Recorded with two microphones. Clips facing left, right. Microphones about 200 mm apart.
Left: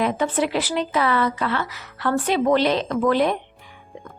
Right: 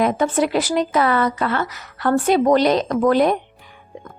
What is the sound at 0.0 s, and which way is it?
A woman's voice, 45° right (ahead or behind).